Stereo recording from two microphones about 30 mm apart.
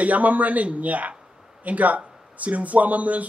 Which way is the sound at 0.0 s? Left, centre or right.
Right.